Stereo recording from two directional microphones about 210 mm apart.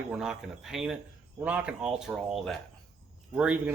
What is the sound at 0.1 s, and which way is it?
Speech, 5° right (ahead or behind).